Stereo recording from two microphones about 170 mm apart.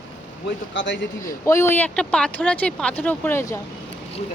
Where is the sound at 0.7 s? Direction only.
90° left.